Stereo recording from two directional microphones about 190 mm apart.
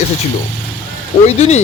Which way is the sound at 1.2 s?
35° left (ahead or behind).